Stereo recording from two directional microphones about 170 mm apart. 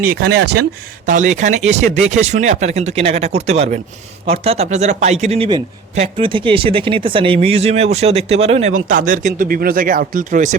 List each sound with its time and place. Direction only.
0.0 s speech: 65° right (ahead or behind)
1.0 s speech: 50° right (ahead or behind)